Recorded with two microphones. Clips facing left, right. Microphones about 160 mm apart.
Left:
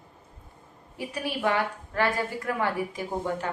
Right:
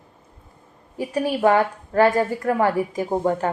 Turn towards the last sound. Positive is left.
turn(degrees=-45)  # may be behind; listen again after turning